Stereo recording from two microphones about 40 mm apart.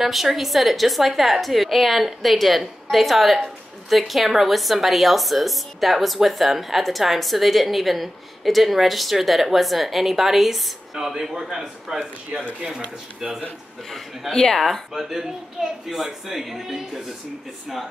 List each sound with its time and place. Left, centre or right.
0.0 s a woman's voice: centre
13.8 s a woman's voice: centre
15.0 s a man's voice: centre
15.9 s a man's voice: centre